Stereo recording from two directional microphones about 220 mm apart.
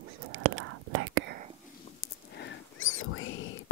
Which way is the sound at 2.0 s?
50° left (ahead or behind).